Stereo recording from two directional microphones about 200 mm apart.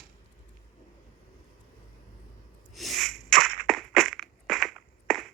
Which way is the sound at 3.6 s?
Centre (ahead or behind).